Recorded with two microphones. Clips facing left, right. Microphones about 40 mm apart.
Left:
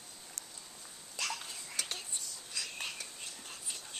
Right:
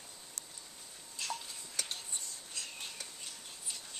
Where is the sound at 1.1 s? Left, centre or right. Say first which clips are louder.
Left 2 dB; left.